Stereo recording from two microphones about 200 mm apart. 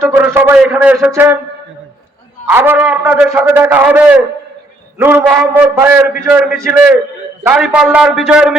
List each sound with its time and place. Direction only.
0.0 s a man's voice: 10° right (ahead or behind)
2.5 s a man's voice: 10° right (ahead or behind)